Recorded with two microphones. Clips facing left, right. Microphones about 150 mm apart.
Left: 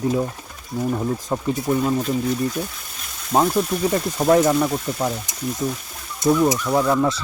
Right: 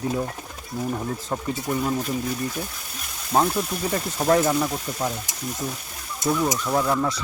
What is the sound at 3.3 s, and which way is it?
Speech, 10° left (ahead or behind).